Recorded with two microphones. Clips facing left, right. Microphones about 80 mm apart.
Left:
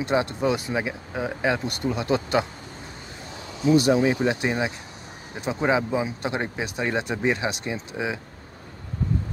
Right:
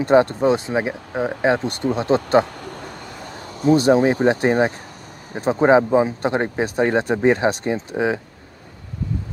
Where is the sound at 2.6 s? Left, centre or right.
Right.